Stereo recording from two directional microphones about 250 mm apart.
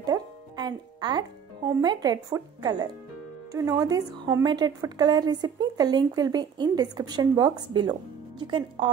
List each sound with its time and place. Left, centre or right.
0.0 s music: centre
1.8 s a woman's voice: centre